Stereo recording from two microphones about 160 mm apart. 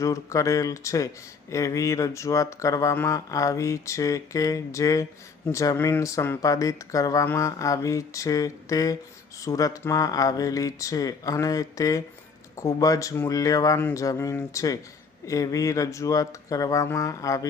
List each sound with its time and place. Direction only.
0.0 s speech: 20° left (ahead or behind)